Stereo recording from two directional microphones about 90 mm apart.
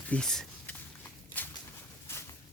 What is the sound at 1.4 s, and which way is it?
Bird, 20° left (ahead or behind).